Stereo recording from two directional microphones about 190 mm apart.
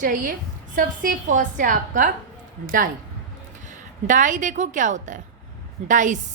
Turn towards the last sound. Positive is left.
turn(degrees=-40)  # may be behind; listen again after turning